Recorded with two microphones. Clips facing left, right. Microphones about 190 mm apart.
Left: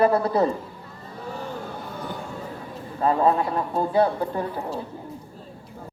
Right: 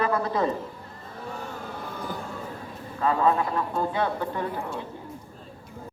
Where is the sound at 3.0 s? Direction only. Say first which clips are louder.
Left 3 dB; 35° left (ahead or behind).